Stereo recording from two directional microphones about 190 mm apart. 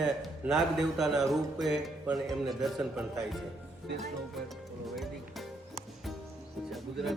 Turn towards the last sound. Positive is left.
turn(degrees=0)  # may be behind; listen again after turning